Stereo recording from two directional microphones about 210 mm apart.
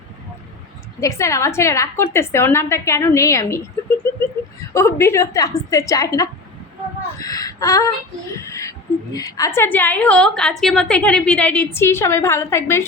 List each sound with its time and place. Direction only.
1.0 s a woman's voice: 15° left (ahead or behind)
4.7 s a woman's voice: 15° left (ahead or behind)
7.2 s a sound: 15° left (ahead or behind)
8.4 s a woman's voice: 15° left (ahead or behind)